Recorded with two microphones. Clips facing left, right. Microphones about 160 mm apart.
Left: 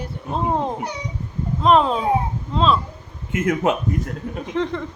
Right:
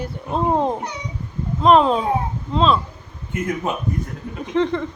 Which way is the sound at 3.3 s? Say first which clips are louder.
Left 4 dB; 90° left.